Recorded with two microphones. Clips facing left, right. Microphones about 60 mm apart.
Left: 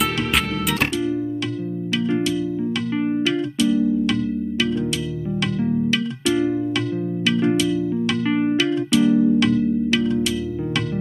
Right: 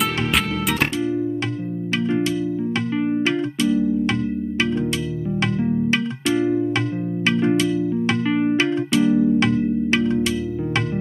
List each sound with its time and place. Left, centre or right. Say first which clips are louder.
0.0 s music: even; centre
0.9 s music: even; right
2.2 s music: even; right
2.9 s music: even; centre
3.3 s music: even; right
5.9 s music: even; right
8.3 s music: even; centre
8.5 s music: even; right